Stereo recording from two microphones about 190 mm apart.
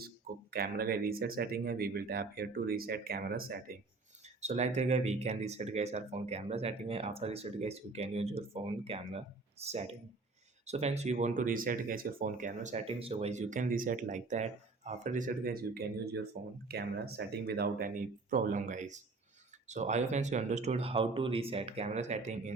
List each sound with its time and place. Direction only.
0.5 s speech: 50° right (ahead or behind)
4.4 s speech: 35° right (ahead or behind)